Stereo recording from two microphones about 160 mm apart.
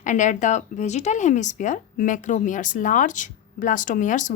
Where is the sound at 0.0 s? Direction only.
50° left (ahead or behind).